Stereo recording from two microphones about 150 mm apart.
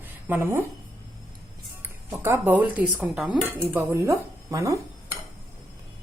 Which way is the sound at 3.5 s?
15° right (ahead or behind).